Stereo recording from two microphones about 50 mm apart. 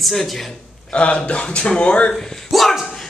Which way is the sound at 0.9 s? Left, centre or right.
Left.